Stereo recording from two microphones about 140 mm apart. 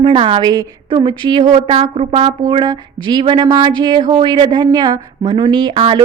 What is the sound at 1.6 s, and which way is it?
Speech, 45° right (ahead or behind).